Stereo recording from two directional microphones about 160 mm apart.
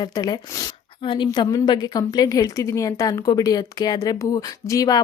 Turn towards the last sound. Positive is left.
turn(degrees=20)  # may be behind; listen again after turning